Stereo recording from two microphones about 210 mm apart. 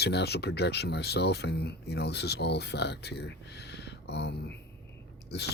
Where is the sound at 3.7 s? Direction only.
55° left (ahead or behind).